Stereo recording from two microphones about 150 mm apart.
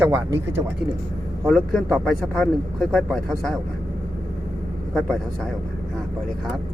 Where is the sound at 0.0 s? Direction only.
15° right (ahead or behind).